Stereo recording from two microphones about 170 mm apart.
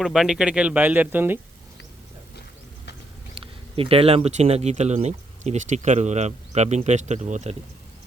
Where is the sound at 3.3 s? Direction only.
30° right (ahead or behind).